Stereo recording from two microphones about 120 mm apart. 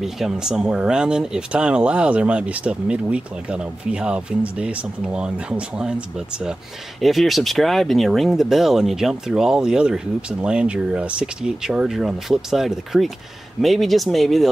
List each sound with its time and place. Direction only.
0.0 s speech: 5° right (ahead or behind)